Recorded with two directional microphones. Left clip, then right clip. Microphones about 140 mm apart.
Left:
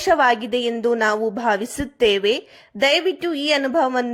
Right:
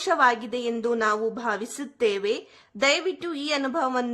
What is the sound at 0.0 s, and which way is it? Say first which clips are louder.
A woman's voice: left 5 dB; 20° left (ahead or behind).